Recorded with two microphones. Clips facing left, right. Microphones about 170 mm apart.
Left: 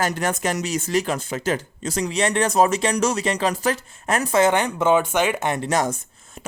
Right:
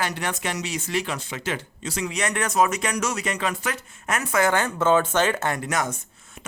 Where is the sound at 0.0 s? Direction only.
45° left (ahead or behind); by 5.6 s 20° left (ahead or behind).